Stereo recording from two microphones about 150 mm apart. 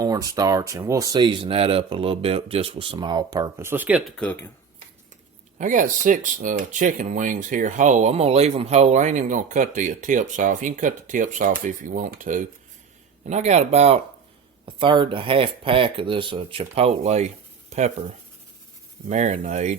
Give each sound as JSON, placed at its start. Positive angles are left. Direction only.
{"t": 0.0, "sound": "speech", "side_deg": -25}
{"t": 4.2, "sound": "speech", "side_deg": 10}
{"t": 5.5, "sound": "speech", "side_deg": -60}
{"t": 14.6, "sound": "speech", "side_deg": -35}
{"t": 19.1, "sound": "speech", "side_deg": -55}